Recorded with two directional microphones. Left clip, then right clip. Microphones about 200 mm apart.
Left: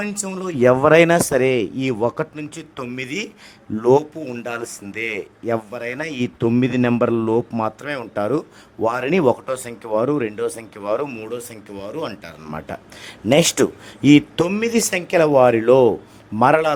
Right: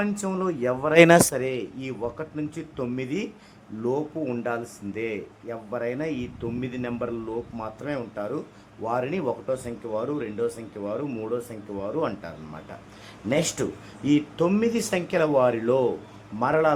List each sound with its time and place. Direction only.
0.2 s speech: centre (ahead or behind)
0.6 s speech: 50° left (ahead or behind)
0.9 s speech: centre (ahead or behind)
1.3 s speech: 40° left (ahead or behind)
4.5 s a man's voice: 55° left (ahead or behind)
7.5 s speech: 45° left (ahead or behind)
11.3 s speech: 10° right (ahead or behind)
12.2 s speech: 50° left (ahead or behind)